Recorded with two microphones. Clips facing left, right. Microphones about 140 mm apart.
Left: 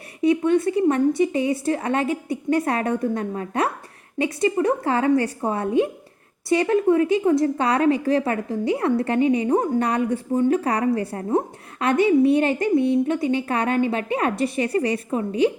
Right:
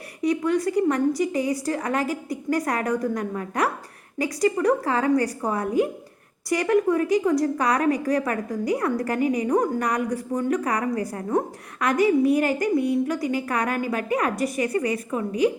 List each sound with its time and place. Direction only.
0.2 s a woman's voice: 25° left (ahead or behind)